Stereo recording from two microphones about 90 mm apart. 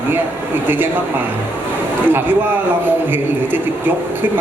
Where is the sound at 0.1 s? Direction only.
25° right (ahead or behind).